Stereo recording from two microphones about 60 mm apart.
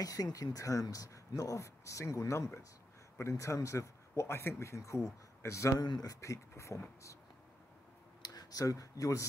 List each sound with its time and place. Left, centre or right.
0.0 s speech: left
4.3 s speech: left
5.9 s speech: left
8.3 s speech: left